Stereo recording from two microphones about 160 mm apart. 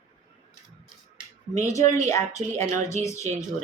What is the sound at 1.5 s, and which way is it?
Speech, 20° left (ahead or behind).